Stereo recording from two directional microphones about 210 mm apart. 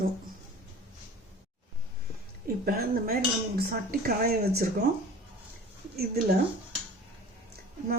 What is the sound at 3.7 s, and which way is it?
Speech, 45° right (ahead or behind).